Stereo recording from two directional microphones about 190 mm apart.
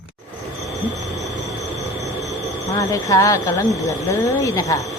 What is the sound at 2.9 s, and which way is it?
A woman's voice, 15° left (ahead or behind).